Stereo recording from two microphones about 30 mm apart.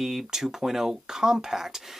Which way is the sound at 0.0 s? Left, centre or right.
Centre.